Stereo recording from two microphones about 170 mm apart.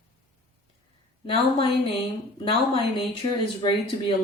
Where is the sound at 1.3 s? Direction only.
30° left (ahead or behind).